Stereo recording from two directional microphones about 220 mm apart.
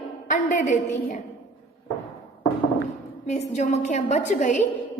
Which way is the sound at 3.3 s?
30° left (ahead or behind).